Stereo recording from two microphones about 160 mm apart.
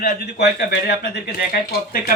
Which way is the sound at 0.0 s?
85° left.